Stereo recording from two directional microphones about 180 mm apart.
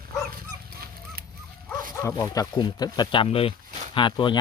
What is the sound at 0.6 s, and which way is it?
Dog, 55° right (ahead or behind).